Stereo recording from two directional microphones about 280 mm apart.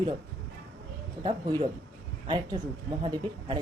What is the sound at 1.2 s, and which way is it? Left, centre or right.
A woman's voice, centre.